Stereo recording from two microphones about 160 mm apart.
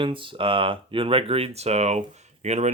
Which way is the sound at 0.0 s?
30° right (ahead or behind).